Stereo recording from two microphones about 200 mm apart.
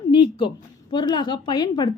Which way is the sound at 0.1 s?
25° left (ahead or behind).